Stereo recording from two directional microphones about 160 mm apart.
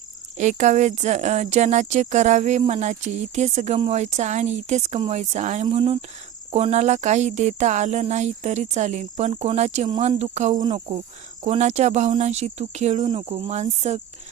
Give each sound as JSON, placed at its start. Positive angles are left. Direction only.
{"t": 0.3, "sound": "speech", "side_deg": -50}
{"t": 5.7, "sound": "cricket", "side_deg": -35}
{"t": 6.5, "sound": "speech", "side_deg": -45}
{"t": 10.5, "sound": "speech", "side_deg": -25}
{"t": 11.4, "sound": "speech", "side_deg": -45}
{"t": 13.1, "sound": "cricket", "side_deg": -35}